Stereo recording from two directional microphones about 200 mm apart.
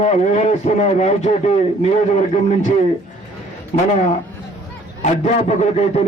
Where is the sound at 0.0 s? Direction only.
35° left (ahead or behind).